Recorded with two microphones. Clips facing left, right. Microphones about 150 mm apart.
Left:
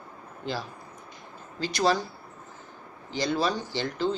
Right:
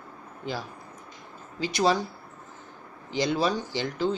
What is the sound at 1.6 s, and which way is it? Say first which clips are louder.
Speech: right 1 dB; 15° right (ahead or behind).